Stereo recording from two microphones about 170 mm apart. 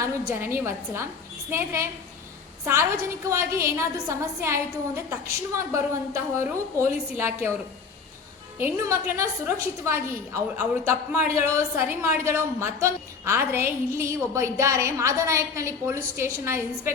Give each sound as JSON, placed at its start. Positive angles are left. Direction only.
{"t": 0.0, "sound": "a woman's voice", "side_deg": -15}
{"t": 8.5, "sound": "a woman's voice", "side_deg": -15}